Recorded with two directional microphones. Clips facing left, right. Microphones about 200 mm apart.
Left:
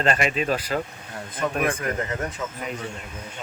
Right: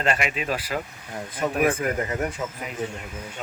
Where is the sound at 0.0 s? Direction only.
35° left (ahead or behind).